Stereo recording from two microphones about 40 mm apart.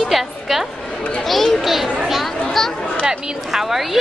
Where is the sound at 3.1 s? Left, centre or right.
Centre.